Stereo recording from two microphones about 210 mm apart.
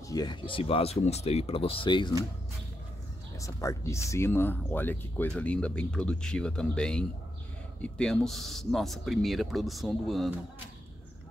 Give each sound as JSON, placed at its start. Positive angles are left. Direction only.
{"t": 0.1, "sound": "speech", "side_deg": 20}
{"t": 3.3, "sound": "speech", "side_deg": 15}